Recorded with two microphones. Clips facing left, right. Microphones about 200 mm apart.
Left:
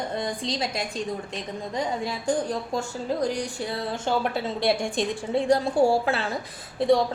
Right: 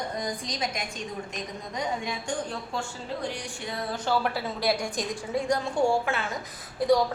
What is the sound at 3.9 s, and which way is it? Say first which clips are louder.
A woman's voice: even; 25° left (ahead or behind).